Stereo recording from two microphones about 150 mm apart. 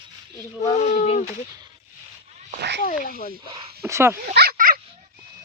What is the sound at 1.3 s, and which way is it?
Speech, 25° right (ahead or behind).